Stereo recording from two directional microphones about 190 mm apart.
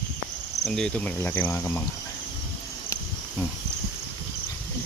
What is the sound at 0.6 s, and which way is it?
Cricket, 5° left (ahead or behind).